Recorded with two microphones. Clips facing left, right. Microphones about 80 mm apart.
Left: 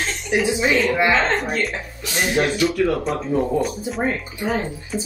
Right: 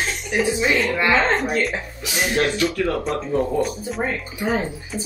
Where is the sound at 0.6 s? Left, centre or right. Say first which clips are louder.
Left 4 dB; centre.